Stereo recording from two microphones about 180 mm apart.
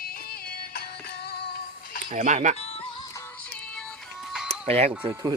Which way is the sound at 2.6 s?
35° left (ahead or behind).